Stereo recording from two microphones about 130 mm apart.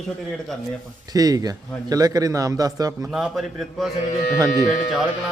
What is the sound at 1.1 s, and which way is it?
A man's voice, 30° right (ahead or behind).